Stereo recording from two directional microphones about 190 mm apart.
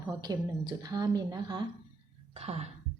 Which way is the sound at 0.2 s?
20° right (ahead or behind).